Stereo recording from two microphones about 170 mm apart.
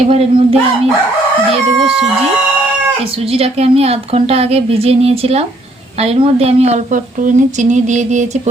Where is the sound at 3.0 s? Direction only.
35° right (ahead or behind).